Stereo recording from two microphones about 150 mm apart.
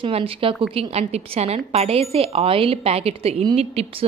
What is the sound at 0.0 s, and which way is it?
A woman's voice, 35° right (ahead or behind).